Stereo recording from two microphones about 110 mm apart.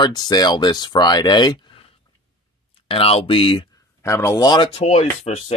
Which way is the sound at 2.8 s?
60° left (ahead or behind).